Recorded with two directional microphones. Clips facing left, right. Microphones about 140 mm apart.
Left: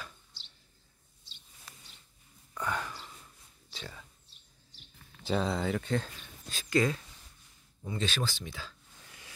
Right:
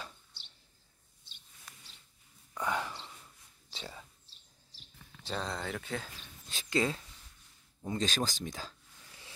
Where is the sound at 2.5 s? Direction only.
15° right (ahead or behind).